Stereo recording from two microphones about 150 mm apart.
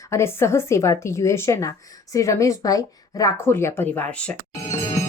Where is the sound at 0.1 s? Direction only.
15° left (ahead or behind).